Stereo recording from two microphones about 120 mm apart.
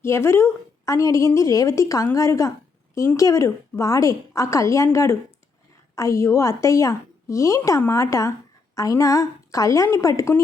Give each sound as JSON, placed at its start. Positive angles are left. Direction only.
{"t": 0.0, "sound": "a woman's voice", "side_deg": 20}